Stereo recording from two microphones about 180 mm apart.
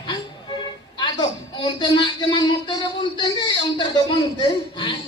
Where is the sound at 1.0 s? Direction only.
25° left (ahead or behind).